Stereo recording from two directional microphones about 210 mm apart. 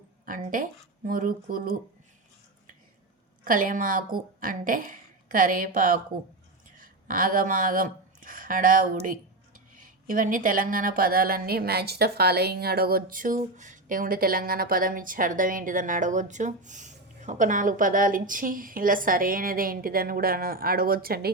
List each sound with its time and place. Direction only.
0.3 s speech: 40° right (ahead or behind)
3.4 s speech: 40° right (ahead or behind)